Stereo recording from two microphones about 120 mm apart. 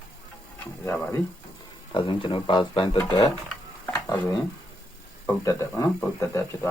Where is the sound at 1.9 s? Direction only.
45° left (ahead or behind).